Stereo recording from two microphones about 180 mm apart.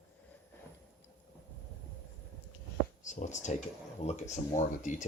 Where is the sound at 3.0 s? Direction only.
45° left (ahead or behind).